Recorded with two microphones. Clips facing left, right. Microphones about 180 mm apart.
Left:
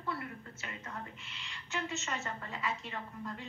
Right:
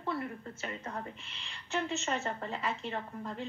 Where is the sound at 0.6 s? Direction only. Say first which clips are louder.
Right 5 dB; 40° right (ahead or behind).